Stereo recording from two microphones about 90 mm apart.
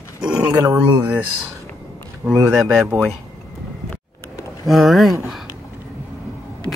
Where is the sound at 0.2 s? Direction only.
15° right (ahead or behind).